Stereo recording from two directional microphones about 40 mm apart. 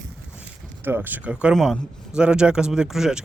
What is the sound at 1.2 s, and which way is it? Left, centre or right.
Speech, right.